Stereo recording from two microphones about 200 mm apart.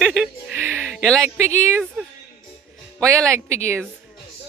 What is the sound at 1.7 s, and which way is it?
Speech, 5° right (ahead or behind).